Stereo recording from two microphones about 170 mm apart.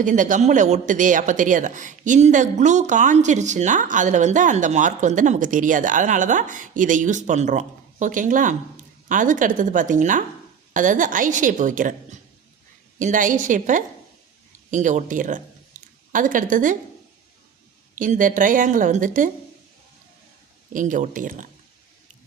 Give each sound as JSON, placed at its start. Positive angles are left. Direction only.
{"t": 0.0, "sound": "speech", "side_deg": -50}
{"t": 15.7, "sound": "a sound", "side_deg": -45}
{"t": 16.1, "sound": "speech", "side_deg": -50}
{"t": 17.9, "sound": "speech", "side_deg": -50}
{"t": 20.7, "sound": "speech", "side_deg": -50}